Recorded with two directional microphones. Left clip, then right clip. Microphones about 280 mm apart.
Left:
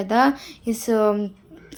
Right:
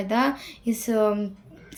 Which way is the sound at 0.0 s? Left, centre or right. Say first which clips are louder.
Left 5 dB; centre.